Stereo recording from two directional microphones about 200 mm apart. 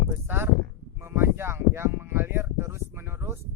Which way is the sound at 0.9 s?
10° right (ahead or behind).